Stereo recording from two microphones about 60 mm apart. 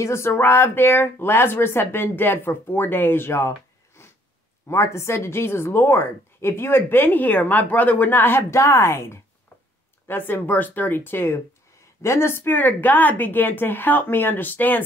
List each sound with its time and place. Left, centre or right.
0.0 s speech: left
4.0 s sniff: left
4.6 s a woman's voice: left